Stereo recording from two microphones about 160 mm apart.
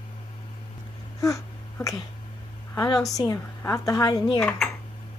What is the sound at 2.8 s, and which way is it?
A woman's voice, 25° left (ahead or behind).